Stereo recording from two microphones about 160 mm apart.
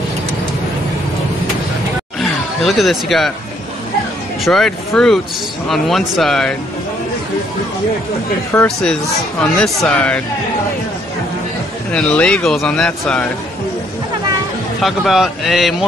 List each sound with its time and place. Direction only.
2.1 s a sound: centre (ahead or behind)
4.5 s speech: 5° left (ahead or behind)
8.5 s speech: 15° left (ahead or behind)
9.4 s speech: 5° left (ahead or behind)
11.9 s speech: 5° left (ahead or behind)
14.8 s speech: centre (ahead or behind)